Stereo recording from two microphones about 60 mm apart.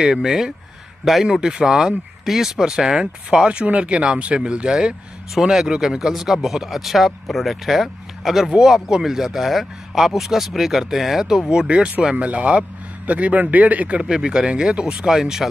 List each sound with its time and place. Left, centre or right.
0.0 s a man's voice: centre; by 14.0 s right
14.0 s speech: centre